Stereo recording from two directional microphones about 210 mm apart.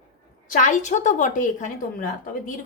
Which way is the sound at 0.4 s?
40° left (ahead or behind).